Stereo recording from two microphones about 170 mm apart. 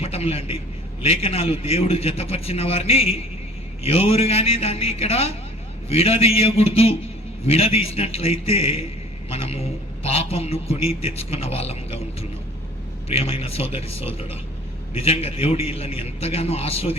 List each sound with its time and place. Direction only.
0.0 s a sound: 35° left (ahead or behind)
1.0 s a man's voice: 35° left (ahead or behind)
13.1 s a man's voice: 35° left (ahead or behind)